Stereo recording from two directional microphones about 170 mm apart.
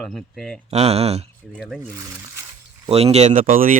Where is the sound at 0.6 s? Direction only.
40° right (ahead or behind).